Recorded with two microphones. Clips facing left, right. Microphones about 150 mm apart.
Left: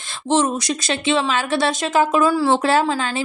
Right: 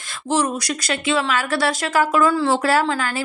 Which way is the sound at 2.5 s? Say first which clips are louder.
Left 1 dB; 25° left (ahead or behind).